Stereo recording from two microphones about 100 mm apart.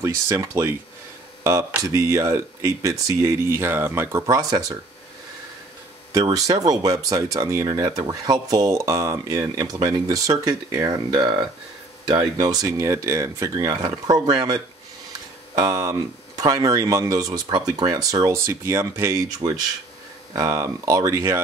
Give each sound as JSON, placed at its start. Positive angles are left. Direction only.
{"t": 0.0, "sound": "speech", "side_deg": -25}
{"t": 6.3, "sound": "speech", "side_deg": -40}
{"t": 17.3, "sound": "speech", "side_deg": -45}
{"t": 20.3, "sound": "speech", "side_deg": -35}